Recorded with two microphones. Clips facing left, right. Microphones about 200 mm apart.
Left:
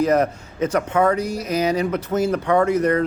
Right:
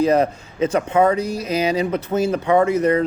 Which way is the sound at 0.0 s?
30° right (ahead or behind).